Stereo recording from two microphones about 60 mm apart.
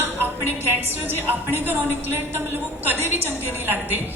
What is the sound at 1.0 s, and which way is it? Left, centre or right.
A woman's voice, right.